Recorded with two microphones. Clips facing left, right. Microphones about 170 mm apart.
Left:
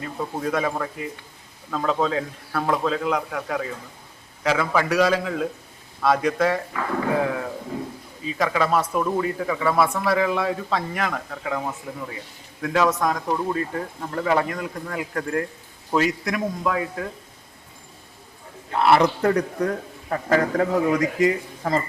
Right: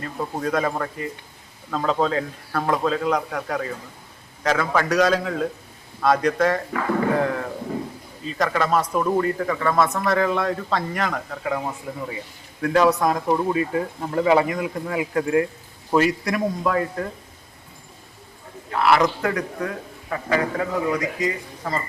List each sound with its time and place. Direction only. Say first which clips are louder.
0.0 s speech: right 1 dB; 5° left (ahead or behind)
18.7 s a man's voice: left 1 dB; 25° left (ahead or behind); by 20.7 s 40° left (ahead or behind)
21.2 s speech: left 5 dB; 55° left (ahead or behind)